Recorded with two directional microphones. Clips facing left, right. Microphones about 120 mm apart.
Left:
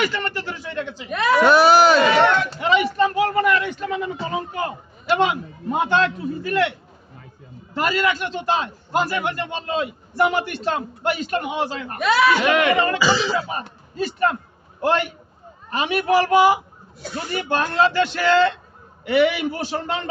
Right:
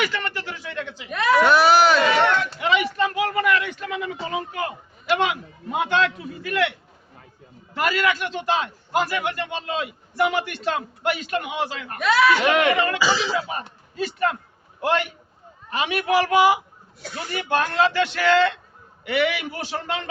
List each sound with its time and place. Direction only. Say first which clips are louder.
0.0 s a sound: left 2 dB; 40° left (ahead or behind)
7.8 s a man's voice: left 1 dB; 30° left (ahead or behind)
11.9 s speech: left 1 dB; 20° left (ahead or behind)
12.4 s a man's voice: left 1 dB; 35° right (ahead or behind)
12.7 s a man's voice: left 3 dB; 35° left (ahead or behind)
13.0 s speech: left 2 dB; centre (ahead or behind)
13.5 s a man's voice: left 2 dB; 35° left (ahead or behind)